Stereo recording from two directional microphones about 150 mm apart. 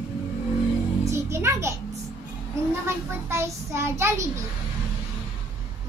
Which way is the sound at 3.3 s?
15° right (ahead or behind).